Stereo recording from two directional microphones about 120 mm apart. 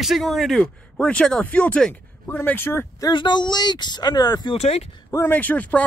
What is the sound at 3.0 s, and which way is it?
Speech, 40° left (ahead or behind).